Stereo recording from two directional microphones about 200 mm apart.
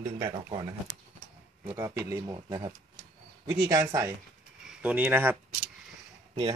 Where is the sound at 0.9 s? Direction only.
90° right.